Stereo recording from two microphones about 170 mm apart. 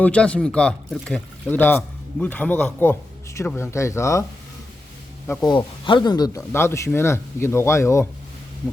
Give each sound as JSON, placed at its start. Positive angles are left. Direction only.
{"t": 0.0, "sound": "speech", "side_deg": 5}
{"t": 5.5, "sound": "speech", "side_deg": 30}